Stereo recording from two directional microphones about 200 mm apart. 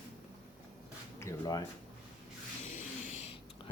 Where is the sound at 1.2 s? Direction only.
15° left (ahead or behind).